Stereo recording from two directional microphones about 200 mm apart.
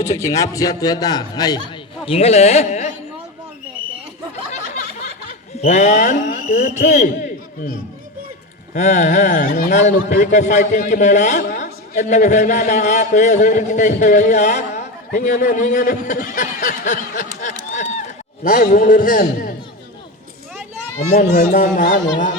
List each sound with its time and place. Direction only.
0.0 s a man's voice: 15° left (ahead or behind)
2.0 s a man's voice: 30° left (ahead or behind)
5.6 s a man's voice: 35° left (ahead or behind)
8.7 s a man's voice: 35° left (ahead or behind)
17.4 s a sound: 35° left (ahead or behind)
18.4 s a man's voice: 45° left (ahead or behind)
21.1 s a man's voice: 50° left (ahead or behind)